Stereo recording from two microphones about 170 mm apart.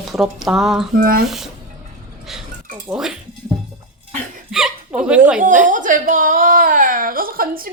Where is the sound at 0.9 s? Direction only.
55° right (ahead or behind).